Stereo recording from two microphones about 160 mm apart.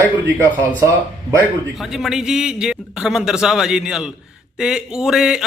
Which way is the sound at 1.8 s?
Centre (ahead or behind).